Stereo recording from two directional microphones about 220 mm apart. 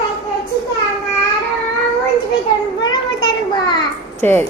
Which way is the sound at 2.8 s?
20° left (ahead or behind).